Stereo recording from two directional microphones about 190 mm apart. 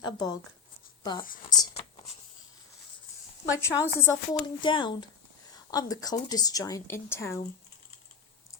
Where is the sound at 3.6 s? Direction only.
15° left (ahead or behind).